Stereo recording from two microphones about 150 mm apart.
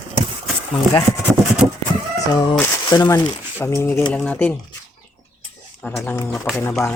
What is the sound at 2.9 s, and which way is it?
Speech, 25° left (ahead or behind).